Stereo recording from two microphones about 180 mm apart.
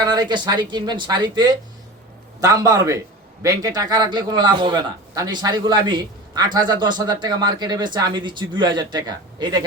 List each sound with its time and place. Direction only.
0.0 s a man's voice: 25° right (ahead or behind)